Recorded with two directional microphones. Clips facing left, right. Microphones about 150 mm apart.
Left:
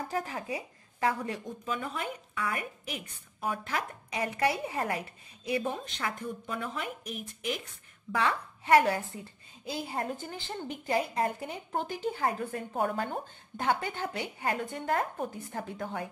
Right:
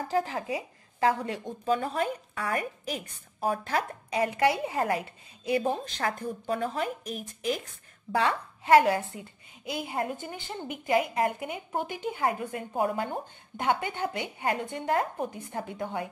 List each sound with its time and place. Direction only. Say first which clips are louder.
0.1 s speech: right 9 dB; 30° right (ahead or behind)
8.7 s a woman's voice: right 3 dB; 20° right (ahead or behind)